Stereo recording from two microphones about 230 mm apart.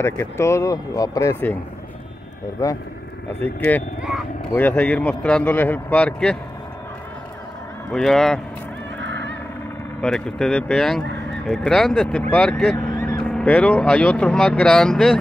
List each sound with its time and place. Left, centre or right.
0.0 s speech: centre
2.6 s speech: centre
7.9 s speech: centre
9.0 s crow: right
10.0 s speech: centre